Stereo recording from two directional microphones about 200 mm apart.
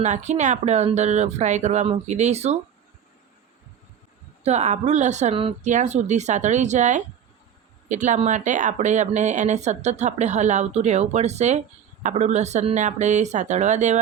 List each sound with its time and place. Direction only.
0.0 s speech: 35° right (ahead or behind)
4.4 s speech: 35° right (ahead or behind)